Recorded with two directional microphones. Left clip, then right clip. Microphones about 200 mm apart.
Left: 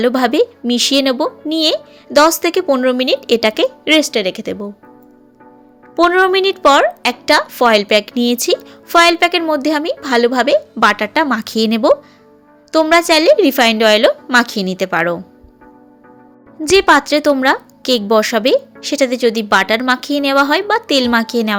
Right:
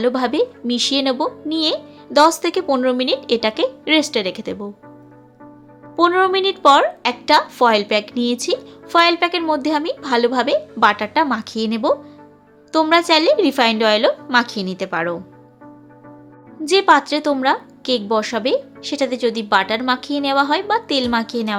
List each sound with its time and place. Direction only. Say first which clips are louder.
0.0 s a woman's voice: left 5 dB; 15° left (ahead or behind)
6.0 s a woman's voice: left 4 dB; 10° left (ahead or behind)
16.6 s a woman's voice: left 3 dB; 15° left (ahead or behind)